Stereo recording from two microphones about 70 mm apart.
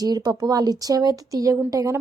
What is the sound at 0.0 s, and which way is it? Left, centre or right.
Speech, right.